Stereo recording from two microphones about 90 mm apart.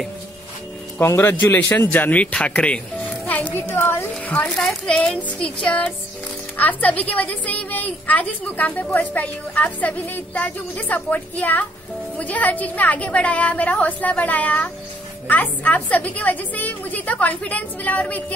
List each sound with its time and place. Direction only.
1.0 s a man's voice: 25° left (ahead or behind)
4.3 s a woman's voice: 10° left (ahead or behind)